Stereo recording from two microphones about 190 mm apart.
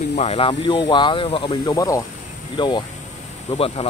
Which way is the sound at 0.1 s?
35° left (ahead or behind).